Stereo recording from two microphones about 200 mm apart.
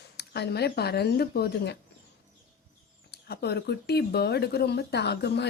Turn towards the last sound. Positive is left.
turn(degrees=55)  # may be behind; listen again after turning